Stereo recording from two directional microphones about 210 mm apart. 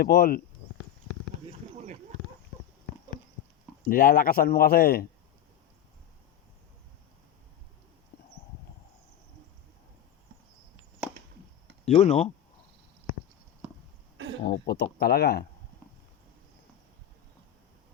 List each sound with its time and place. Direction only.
0.0 s speech: 45° left (ahead or behind)
3.8 s speech: 40° left (ahead or behind)
8.1 s clip-clop: 45° left (ahead or behind)
11.9 s speech: 30° left (ahead or behind)
14.4 s speech: 50° left (ahead or behind)